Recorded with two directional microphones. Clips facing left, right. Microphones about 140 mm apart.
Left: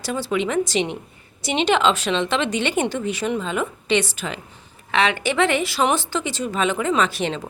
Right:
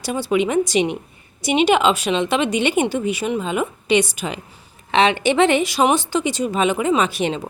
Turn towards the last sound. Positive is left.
turn(degrees=-15)  # may be behind; listen again after turning